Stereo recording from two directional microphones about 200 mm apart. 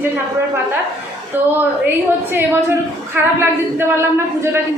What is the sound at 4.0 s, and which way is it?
Speech, 10° right (ahead or behind).